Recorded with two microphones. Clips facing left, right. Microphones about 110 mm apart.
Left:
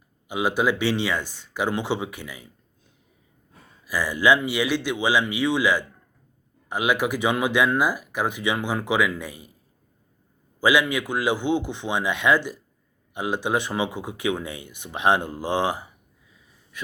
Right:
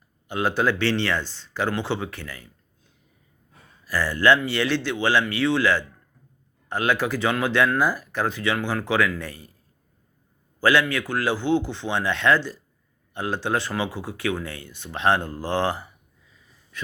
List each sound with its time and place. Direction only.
0.3 s speech: 10° left (ahead or behind)
3.8 s speech: 10° left (ahead or behind)
10.6 s speech: 10° left (ahead or behind)